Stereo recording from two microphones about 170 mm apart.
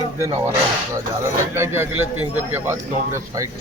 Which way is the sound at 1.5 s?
15° right (ahead or behind).